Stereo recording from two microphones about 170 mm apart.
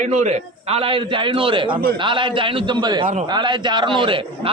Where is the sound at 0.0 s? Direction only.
45° right (ahead or behind).